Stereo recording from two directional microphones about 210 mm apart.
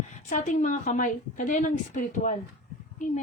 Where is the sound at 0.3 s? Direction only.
35° left (ahead or behind).